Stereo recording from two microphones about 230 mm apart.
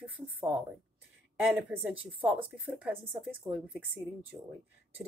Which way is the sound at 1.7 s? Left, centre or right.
Centre.